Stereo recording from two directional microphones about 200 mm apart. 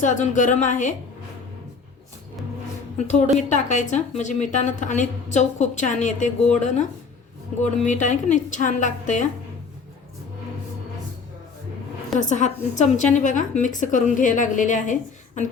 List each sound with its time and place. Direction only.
0.0 s a woman's voice: 40° left (ahead or behind)
3.3 s a woman's voice: 35° left (ahead or behind)
12.2 s a woman's voice: 40° left (ahead or behind)